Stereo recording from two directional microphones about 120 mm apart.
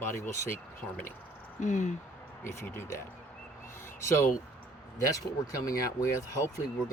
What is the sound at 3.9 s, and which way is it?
Speech, 20° left (ahead or behind).